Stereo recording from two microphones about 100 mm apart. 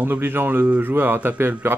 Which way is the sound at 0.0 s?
20° right (ahead or behind).